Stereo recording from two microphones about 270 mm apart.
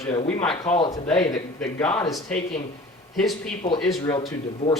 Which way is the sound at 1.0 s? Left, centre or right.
Centre.